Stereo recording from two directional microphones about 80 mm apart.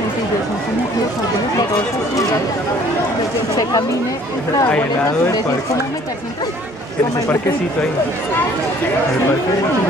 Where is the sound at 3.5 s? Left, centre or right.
Left.